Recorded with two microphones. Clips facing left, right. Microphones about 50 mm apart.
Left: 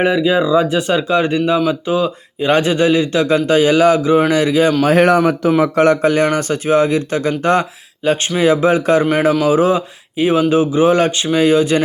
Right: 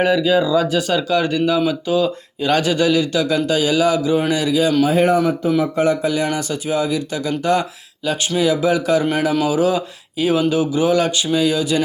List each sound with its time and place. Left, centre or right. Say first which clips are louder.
0.0 s speech: left 2 dB; left
4.9 s speech: left 4 dB; left